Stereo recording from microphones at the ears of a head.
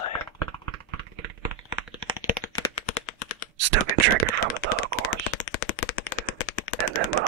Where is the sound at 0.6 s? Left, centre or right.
Right.